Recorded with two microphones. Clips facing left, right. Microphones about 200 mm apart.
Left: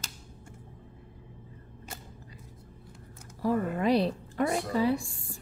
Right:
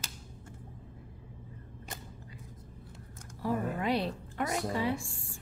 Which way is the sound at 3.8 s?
35° left (ahead or behind).